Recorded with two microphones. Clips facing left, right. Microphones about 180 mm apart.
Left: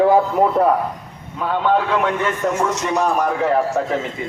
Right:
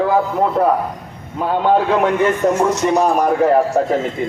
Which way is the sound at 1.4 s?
40° right (ahead or behind).